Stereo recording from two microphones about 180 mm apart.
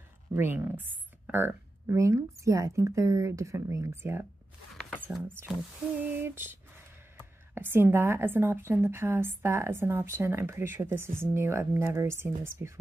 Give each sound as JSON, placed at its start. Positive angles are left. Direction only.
{"t": 0.3, "sound": "a woman's voice", "side_deg": -10}
{"t": 4.7, "sound": "a sound", "side_deg": 0}
{"t": 5.0, "sound": "a woman's voice", "side_deg": -10}